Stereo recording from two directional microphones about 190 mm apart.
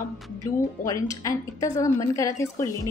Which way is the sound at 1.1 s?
15° left (ahead or behind).